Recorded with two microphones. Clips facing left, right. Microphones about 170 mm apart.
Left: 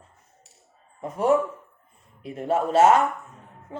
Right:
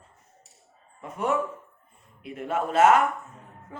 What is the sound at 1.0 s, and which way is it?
Speech, 35° left (ahead or behind).